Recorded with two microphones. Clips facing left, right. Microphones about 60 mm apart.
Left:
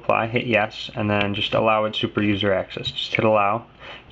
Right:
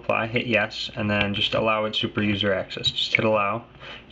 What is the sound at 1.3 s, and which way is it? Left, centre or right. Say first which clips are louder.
Speech: left 2 dB; centre.